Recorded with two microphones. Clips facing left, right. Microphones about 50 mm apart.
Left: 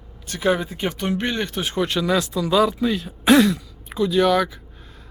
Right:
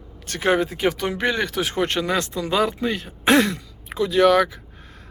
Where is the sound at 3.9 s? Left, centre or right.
Right.